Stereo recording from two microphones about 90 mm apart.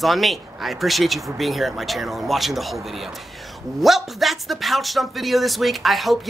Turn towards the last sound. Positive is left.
turn(degrees=0)  # may be behind; listen again after turning